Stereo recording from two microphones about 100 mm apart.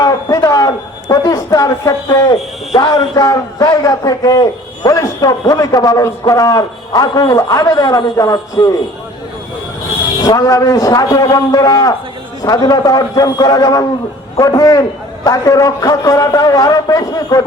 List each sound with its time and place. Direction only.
0.0 s a man's voice: 35° left (ahead or behind)
10.2 s a man's voice: 40° left (ahead or behind)